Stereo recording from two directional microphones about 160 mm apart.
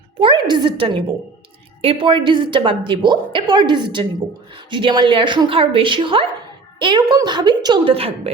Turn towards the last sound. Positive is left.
turn(degrees=-25)  # may be behind; listen again after turning